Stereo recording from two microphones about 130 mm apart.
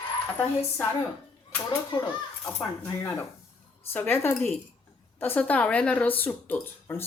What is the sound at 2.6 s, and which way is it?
Speech, 25° left (ahead or behind).